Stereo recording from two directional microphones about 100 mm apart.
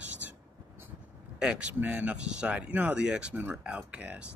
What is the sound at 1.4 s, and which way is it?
Speech, 10° right (ahead or behind).